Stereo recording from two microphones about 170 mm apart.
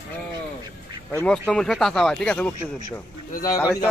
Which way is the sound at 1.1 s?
5° left (ahead or behind).